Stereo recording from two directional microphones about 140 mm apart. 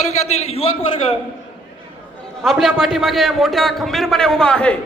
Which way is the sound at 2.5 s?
Centre (ahead or behind).